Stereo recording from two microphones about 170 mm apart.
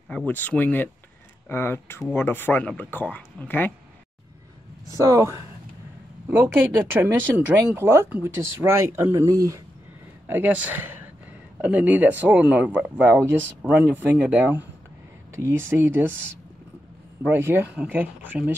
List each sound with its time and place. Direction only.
0.3 s speech: 10° left (ahead or behind)
4.9 s speech: 20° right (ahead or behind)
17.2 s speech: 10° right (ahead or behind)